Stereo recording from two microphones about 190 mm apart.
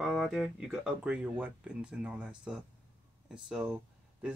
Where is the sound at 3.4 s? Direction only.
5° right (ahead or behind).